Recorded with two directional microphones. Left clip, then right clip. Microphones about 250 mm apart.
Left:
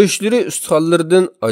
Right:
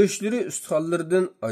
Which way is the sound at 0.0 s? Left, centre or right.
Left.